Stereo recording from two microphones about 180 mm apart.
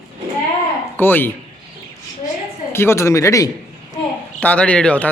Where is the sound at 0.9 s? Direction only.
10° left (ahead or behind).